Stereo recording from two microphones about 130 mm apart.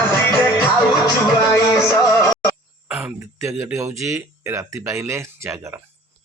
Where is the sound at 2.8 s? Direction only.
15° right (ahead or behind).